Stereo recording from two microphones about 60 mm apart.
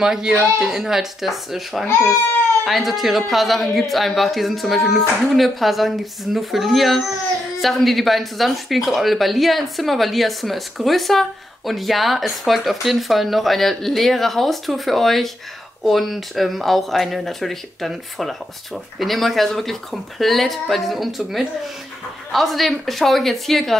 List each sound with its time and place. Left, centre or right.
0.0 s speech: centre
1.9 s speech: left
2.6 s speech: centre